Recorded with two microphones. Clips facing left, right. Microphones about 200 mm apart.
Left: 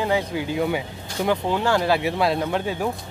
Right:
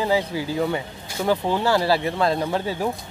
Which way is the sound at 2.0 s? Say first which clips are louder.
Even; 10° left (ahead or behind).